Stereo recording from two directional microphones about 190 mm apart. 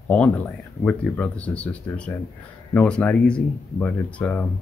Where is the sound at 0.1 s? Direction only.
10° left (ahead or behind).